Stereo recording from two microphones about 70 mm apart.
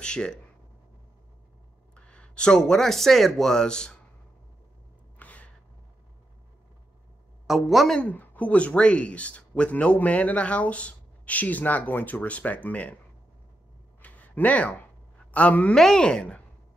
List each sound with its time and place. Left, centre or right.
0.0 s speech: centre
2.0 s speech: centre
5.2 s gasp: left
7.4 s a woman's voice: centre
8.0 s speech: left
14.0 s a sound: left
15.3 s speech: centre
15.7 s speech: centre